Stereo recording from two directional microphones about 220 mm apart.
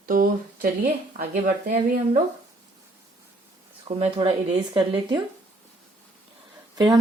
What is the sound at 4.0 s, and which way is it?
Speech, 30° right (ahead or behind).